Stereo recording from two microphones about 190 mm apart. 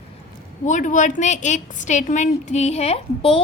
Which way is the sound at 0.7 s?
40° left (ahead or behind).